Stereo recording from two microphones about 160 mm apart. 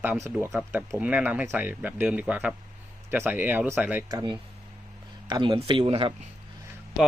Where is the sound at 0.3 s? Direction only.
15° right (ahead or behind).